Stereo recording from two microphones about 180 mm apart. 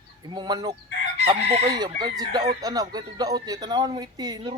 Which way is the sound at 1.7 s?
25° right (ahead or behind).